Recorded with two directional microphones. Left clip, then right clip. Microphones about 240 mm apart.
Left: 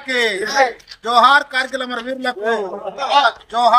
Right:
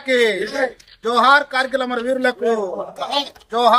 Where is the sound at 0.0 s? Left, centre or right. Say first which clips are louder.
Right 1 dB; centre.